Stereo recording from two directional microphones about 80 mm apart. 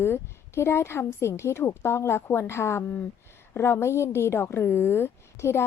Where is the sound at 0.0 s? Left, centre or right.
Left.